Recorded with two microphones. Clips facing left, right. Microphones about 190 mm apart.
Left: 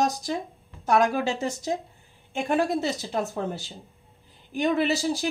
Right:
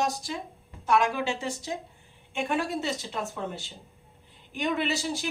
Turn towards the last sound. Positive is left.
turn(degrees=35)  # may be behind; listen again after turning